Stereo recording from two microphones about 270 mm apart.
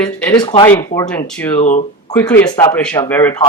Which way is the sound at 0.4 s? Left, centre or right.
Centre.